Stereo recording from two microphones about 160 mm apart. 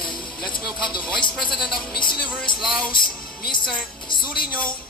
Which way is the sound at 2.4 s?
5° left (ahead or behind).